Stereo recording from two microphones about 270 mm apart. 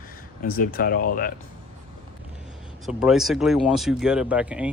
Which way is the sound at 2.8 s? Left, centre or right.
Centre.